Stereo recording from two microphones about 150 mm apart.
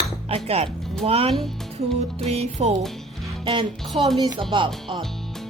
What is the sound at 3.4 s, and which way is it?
Music, 35° right (ahead or behind).